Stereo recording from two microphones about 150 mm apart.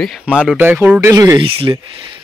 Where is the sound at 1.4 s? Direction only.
35° right (ahead or behind).